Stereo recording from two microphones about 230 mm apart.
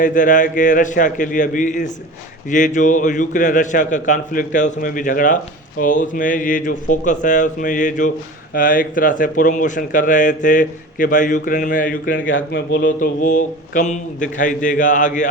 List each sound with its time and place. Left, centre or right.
0.0 s speech: left
12.3 s speech: left